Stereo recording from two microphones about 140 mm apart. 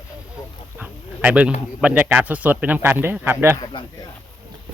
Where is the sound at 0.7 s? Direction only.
10° right (ahead or behind).